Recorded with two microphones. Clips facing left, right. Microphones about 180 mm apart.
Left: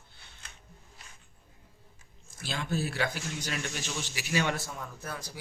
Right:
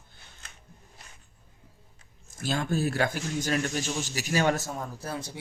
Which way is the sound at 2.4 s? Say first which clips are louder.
Right 5 dB; 45° right (ahead or behind).